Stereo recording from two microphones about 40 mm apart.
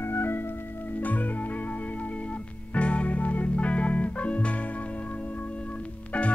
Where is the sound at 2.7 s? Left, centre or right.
Left.